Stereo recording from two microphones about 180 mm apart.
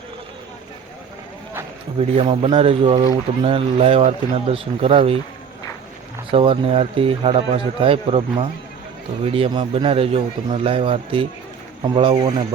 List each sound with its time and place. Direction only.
2.0 s speech: 30° right (ahead or behind)
6.3 s a man's voice: 30° right (ahead or behind)